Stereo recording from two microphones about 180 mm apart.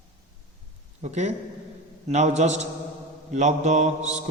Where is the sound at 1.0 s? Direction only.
40° right (ahead or behind).